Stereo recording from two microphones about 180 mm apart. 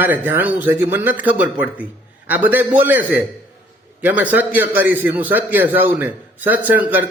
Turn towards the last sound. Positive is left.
turn(degrees=-10)  # may be behind; listen again after turning